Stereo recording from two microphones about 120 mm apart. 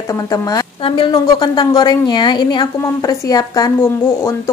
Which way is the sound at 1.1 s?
35° left (ahead or behind).